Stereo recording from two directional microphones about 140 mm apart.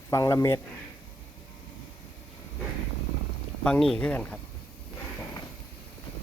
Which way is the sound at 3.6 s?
5° left (ahead or behind).